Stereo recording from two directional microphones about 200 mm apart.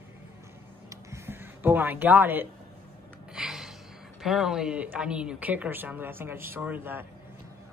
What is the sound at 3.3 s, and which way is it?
Gasp, centre (ahead or behind).